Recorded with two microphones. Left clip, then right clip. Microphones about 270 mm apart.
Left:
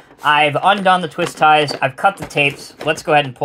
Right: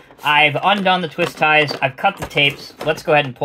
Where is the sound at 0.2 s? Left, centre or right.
Left.